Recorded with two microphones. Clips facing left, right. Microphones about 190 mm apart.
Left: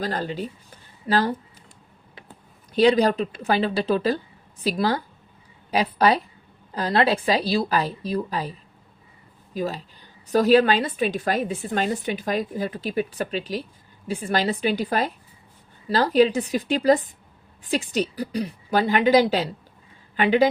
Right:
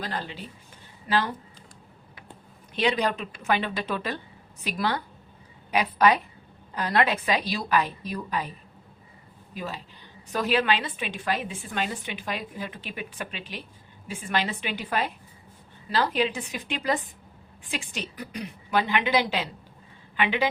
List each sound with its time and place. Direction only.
0.0 s a woman's voice: 40° left (ahead or behind)
2.7 s a woman's voice: 40° left (ahead or behind)
9.6 s a woman's voice: 40° left (ahead or behind)